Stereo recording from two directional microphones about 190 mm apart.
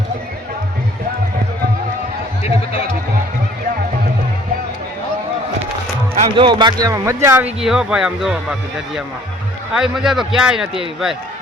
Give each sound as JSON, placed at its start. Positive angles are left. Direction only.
{"t": 6.1, "sound": "a man's voice", "side_deg": -25}
{"t": 9.7, "sound": "a man's voice", "side_deg": -5}